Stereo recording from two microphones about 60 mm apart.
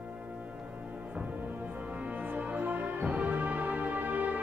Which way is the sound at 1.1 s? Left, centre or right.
Right.